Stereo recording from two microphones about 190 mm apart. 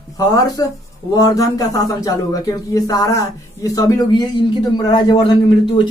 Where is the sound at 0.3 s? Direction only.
20° left (ahead or behind).